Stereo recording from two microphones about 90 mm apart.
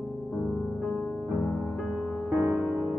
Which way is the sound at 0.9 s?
25° left (ahead or behind).